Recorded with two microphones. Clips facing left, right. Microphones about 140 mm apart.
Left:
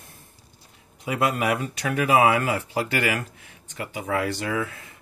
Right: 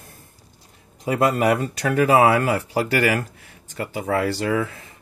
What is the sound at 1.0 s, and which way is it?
Speech, 40° right (ahead or behind).